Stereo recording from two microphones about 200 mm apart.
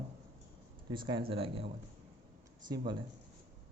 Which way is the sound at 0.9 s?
25° right (ahead or behind).